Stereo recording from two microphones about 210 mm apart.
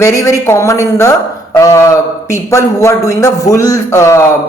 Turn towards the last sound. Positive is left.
turn(degrees=15)  # may be behind; listen again after turning